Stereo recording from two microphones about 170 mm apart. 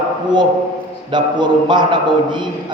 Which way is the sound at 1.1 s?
25° right (ahead or behind).